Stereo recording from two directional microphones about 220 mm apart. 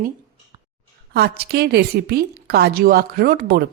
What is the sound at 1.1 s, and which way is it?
A woman's voice, 45° right (ahead or behind).